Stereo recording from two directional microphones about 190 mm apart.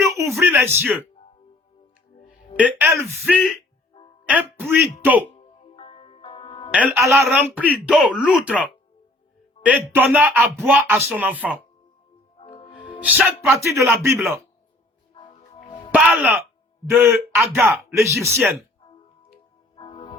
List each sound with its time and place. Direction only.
0.0 s a sound: 15° right (ahead or behind)
2.6 s speech: 10° right (ahead or behind)
5.3 s music: 30° left (ahead or behind)
6.7 s speech: 5° right (ahead or behind)
9.6 s speech: 10° right (ahead or behind)
12.4 s music: 30° left (ahead or behind)
13.0 s speech: 10° right (ahead or behind)
15.1 s music: 25° left (ahead or behind)
15.9 s music: 5° right (ahead or behind)
16.9 s speech: 10° right (ahead or behind)
19.7 s music: 30° left (ahead or behind)